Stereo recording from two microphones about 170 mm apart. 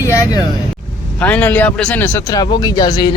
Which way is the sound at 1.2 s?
10° left (ahead or behind).